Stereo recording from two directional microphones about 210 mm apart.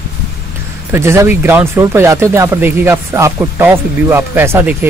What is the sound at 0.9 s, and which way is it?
Speech, 10° right (ahead or behind).